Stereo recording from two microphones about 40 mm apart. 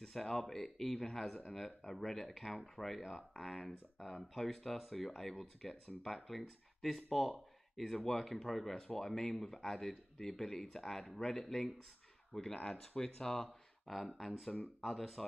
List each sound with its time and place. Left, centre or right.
0.0 s speech: centre